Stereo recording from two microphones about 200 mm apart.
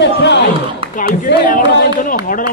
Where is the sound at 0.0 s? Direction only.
60° left (ahead or behind).